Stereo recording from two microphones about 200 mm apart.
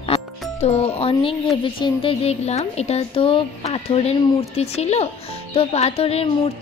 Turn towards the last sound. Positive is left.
turn(degrees=30)  # may be behind; listen again after turning